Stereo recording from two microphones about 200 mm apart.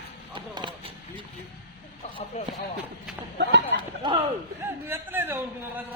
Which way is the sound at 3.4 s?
60° right (ahead or behind).